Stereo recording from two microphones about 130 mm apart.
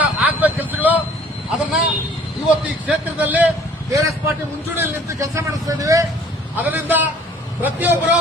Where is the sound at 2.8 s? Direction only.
15° right (ahead or behind).